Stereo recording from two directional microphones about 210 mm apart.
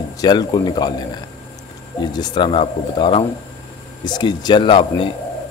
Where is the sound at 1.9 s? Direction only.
20° left (ahead or behind).